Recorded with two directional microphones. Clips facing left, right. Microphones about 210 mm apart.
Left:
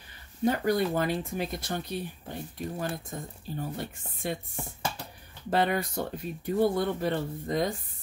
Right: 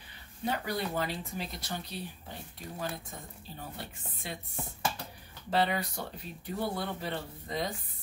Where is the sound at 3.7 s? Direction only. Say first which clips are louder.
Left 7 dB; 50° left (ahead or behind).